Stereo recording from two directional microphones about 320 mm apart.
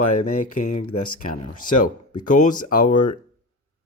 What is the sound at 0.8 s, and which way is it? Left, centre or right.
Speech, left.